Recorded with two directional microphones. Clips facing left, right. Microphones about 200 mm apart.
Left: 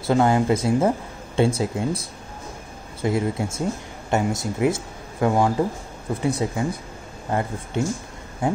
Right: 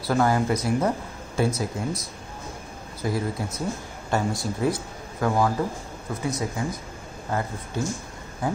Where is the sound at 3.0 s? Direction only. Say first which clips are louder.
Left 4 dB; 25° left (ahead or behind).